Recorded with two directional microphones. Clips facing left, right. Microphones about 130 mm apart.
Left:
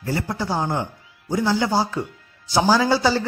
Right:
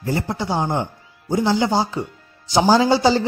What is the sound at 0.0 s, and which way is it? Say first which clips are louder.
A man's voice: right 2 dB; 20° right (ahead or behind).